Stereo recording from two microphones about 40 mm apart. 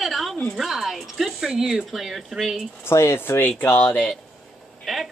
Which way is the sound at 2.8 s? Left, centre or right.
Left.